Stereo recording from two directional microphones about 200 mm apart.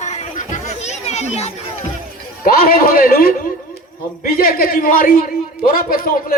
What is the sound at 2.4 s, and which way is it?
A man's voice, 50° left (ahead or behind).